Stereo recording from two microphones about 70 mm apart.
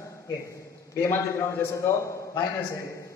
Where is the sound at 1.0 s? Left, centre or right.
Left.